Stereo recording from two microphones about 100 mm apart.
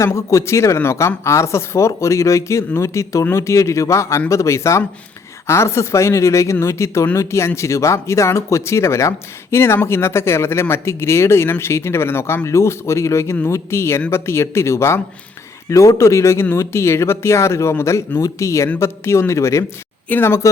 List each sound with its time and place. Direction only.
0.0 s speech: 30° left (ahead or behind)